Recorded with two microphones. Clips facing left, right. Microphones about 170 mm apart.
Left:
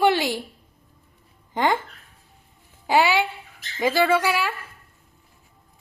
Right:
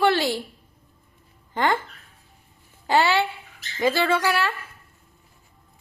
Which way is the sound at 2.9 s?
10° left (ahead or behind).